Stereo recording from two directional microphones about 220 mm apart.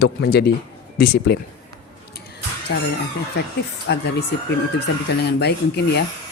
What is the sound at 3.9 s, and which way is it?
Speech, 50° left (ahead or behind).